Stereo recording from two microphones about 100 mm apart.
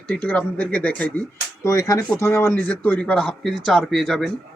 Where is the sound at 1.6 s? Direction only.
35° left (ahead or behind).